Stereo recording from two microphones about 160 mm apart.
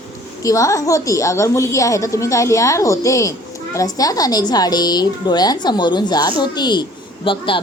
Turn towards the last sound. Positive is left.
turn(degrees=30)  # may be behind; listen again after turning